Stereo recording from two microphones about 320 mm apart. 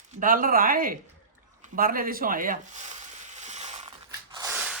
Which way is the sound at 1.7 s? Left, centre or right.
Right.